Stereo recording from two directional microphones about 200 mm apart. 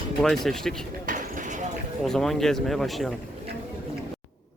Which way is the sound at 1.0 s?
40° right (ahead or behind).